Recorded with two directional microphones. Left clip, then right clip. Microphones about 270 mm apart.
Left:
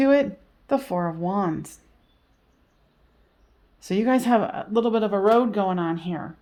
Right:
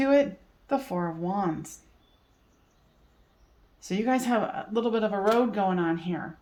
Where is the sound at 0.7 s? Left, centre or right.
Left.